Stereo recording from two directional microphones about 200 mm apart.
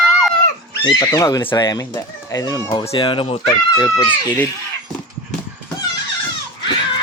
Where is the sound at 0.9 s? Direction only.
20° left (ahead or behind).